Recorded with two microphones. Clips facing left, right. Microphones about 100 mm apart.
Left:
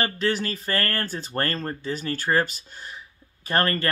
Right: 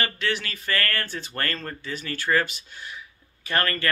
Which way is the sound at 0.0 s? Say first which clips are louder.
Left 3 dB; 35° left (ahead or behind).